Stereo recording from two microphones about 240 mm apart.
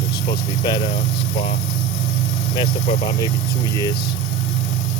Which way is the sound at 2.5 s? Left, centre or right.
Centre.